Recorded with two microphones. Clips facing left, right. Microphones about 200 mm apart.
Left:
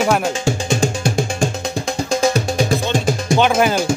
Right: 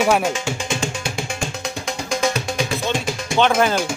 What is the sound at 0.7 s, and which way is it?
Music, 40° left (ahead or behind).